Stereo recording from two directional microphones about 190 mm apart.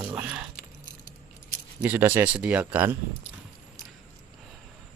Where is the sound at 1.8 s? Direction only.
10° right (ahead or behind).